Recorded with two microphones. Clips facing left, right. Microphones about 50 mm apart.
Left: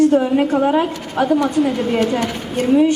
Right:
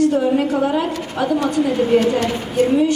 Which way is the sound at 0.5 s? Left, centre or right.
Centre.